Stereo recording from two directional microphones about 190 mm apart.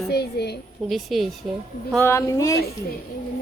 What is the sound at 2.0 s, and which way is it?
Speech, 15° left (ahead or behind).